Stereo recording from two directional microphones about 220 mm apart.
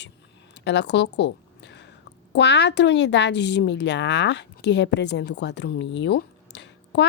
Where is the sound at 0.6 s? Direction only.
50° left (ahead or behind).